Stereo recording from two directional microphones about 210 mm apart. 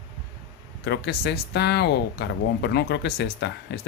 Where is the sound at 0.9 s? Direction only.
50° left (ahead or behind).